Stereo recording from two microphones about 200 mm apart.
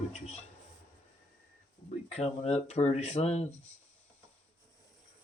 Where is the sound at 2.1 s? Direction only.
30° left (ahead or behind).